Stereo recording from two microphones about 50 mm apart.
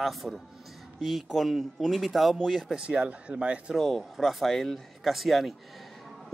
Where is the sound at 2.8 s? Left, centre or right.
Centre.